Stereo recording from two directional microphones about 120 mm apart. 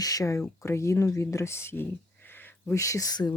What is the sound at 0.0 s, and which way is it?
Speech, 30° left (ahead or behind).